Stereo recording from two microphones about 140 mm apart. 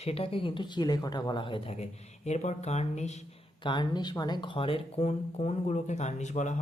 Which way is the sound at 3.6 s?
30° left (ahead or behind).